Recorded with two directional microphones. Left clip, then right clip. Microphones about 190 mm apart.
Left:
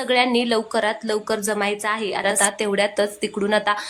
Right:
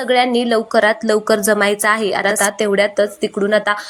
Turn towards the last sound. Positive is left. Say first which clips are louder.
# right 5 dB
turn(degrees=-10)  # may be behind; listen again after turning